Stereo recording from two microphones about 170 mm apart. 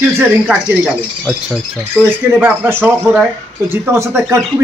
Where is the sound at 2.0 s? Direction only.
10° right (ahead or behind).